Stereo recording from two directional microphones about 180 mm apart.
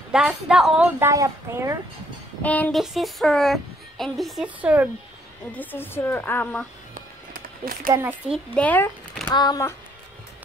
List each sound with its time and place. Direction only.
0.1 s speech: 5° right (ahead or behind)
2.4 s a woman's voice: 10° left (ahead or behind); by 4.8 s 5° right (ahead or behind)
5.5 s a woman's voice: 10° left (ahead or behind)
6.9 s music: 50° right (ahead or behind)
7.9 s speech: 10° right (ahead or behind)
8.5 s speech: 10° left (ahead or behind)
9.3 s speech: 20° left (ahead or behind)